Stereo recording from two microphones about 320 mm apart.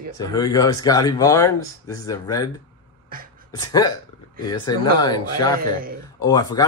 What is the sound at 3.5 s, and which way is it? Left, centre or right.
Speech, centre.